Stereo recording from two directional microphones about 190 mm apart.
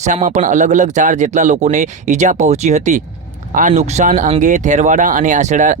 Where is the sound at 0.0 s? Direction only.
40° right (ahead or behind).